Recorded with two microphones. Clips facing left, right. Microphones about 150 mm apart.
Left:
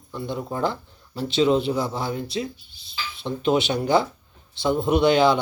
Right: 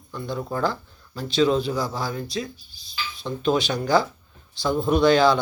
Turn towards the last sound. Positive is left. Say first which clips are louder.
# even
turn(degrees=20)  # may be behind; listen again after turning